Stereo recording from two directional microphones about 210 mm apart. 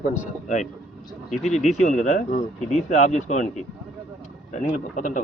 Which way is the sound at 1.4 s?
35° left (ahead or behind).